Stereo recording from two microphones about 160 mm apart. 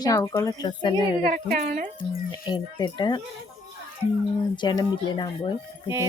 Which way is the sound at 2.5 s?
30° left (ahead or behind).